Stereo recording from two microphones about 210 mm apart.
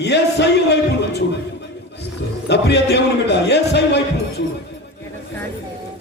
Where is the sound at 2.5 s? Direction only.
55° left (ahead or behind).